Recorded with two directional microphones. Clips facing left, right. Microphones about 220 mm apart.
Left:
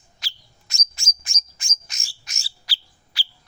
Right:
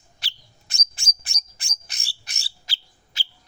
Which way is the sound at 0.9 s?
35° right (ahead or behind).